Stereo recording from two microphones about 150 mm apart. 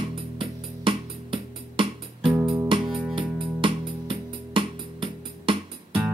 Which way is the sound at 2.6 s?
35° right (ahead or behind).